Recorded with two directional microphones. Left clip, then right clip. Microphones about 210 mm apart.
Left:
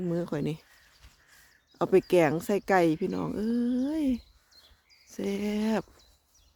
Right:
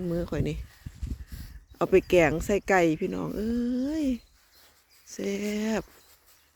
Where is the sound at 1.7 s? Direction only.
5° left (ahead or behind).